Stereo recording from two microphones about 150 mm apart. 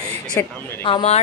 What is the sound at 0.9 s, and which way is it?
Speech, 40° left (ahead or behind).